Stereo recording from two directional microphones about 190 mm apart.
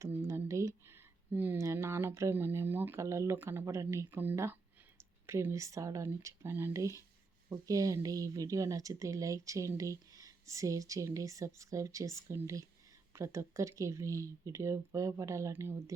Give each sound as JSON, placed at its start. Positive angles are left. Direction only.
{"t": 0.0, "sound": "a woman's voice", "side_deg": -15}